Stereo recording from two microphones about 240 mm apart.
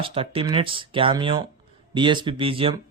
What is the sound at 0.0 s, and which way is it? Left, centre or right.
A man's voice, right.